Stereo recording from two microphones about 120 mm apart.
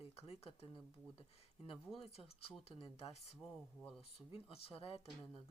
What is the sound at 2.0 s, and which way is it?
Speech, 50° left (ahead or behind).